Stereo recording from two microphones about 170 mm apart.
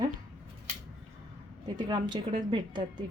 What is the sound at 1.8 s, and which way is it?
Speech, 25° right (ahead or behind).